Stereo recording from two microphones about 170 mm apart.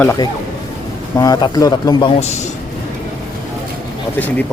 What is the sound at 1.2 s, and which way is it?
Speech, 20° left (ahead or behind).